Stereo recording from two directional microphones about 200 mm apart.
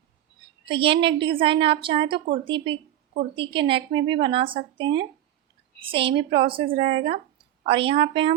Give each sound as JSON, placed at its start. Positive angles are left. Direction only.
{"t": 0.7, "sound": "a woman's voice", "side_deg": -25}